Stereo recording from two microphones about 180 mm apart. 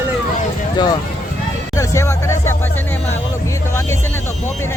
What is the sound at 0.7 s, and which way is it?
Speech, 25° left (ahead or behind).